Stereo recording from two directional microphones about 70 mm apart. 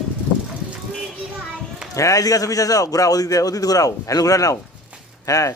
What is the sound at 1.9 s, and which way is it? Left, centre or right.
A man's voice, left.